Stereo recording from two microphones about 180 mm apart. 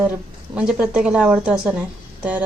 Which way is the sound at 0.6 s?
5° right (ahead or behind).